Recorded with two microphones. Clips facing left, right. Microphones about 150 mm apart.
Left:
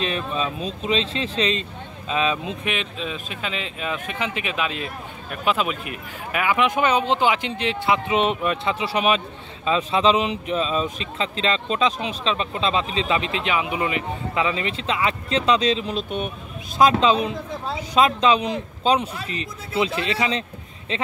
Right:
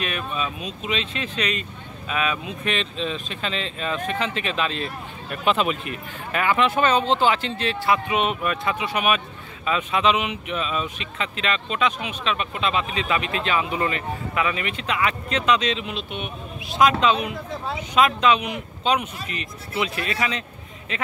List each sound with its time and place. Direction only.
0.0 s speech: 30° left (ahead or behind)
2.6 s speech: 10° left (ahead or behind); by 21.0 s 30° left (ahead or behind)